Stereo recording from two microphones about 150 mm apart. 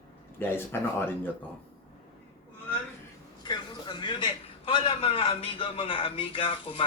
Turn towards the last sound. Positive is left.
turn(degrees=35)  # may be behind; listen again after turning